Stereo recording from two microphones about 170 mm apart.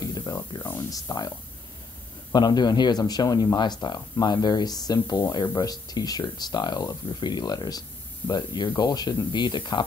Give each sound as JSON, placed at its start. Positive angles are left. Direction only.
{"t": 0.0, "sound": "speech", "side_deg": 25}
{"t": 2.3, "sound": "speech", "side_deg": 25}